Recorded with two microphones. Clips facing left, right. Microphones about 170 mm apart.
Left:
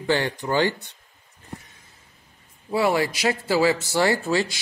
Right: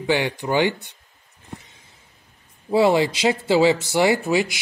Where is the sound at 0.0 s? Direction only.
15° right (ahead or behind).